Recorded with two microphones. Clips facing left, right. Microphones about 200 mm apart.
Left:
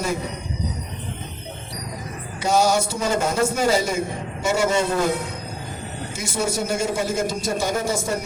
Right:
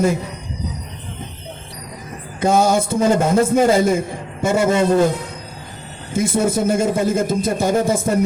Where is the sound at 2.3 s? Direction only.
55° right (ahead or behind).